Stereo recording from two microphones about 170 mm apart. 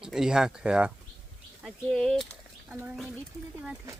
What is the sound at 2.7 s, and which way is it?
Speech, 10° right (ahead or behind).